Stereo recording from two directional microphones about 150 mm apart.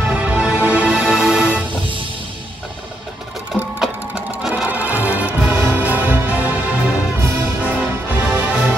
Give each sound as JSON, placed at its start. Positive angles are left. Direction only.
{"t": 0.0, "sound": "music", "side_deg": -10}
{"t": 3.5, "sound": "sewing machine", "side_deg": 0}
{"t": 4.4, "sound": "music", "side_deg": -5}